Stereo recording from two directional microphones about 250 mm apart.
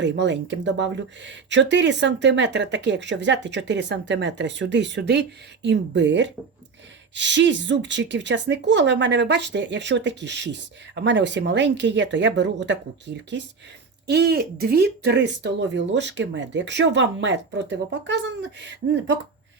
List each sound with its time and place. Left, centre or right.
0.0 s speech: right